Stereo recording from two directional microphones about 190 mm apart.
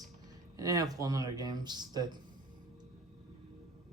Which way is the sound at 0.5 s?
20° right (ahead or behind).